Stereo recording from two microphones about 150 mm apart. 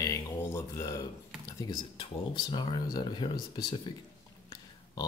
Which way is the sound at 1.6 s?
30° left (ahead or behind).